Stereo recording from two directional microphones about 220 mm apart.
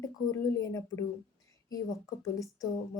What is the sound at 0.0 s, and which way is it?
A woman's voice, 15° left (ahead or behind).